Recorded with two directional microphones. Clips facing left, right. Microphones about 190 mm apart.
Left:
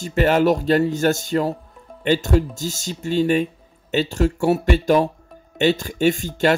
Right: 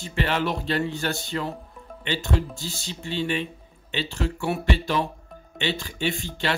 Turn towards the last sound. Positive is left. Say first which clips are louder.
# left 9 dB
turn(degrees=45)  # may be behind; listen again after turning